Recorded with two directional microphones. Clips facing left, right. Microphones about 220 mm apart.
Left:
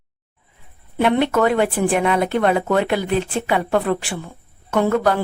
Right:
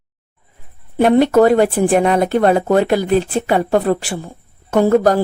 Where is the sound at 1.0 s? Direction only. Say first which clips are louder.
Right 6 dB; 40° right (ahead or behind).